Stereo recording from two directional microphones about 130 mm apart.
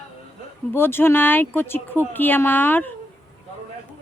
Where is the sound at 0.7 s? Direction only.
15° left (ahead or behind).